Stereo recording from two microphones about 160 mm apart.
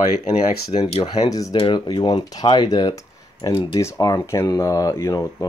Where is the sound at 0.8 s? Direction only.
40° left (ahead or behind).